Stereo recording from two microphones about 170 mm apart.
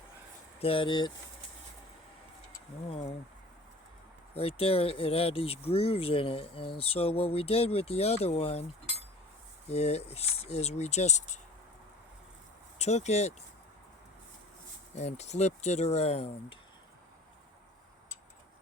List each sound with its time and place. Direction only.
0.6 s speech: 30° left (ahead or behind)
2.9 s speech: 35° left (ahead or behind)
4.4 s speech: 35° left (ahead or behind)
9.6 s speech: 40° left (ahead or behind)
12.8 s speech: 40° left (ahead or behind)
14.9 s speech: 40° left (ahead or behind)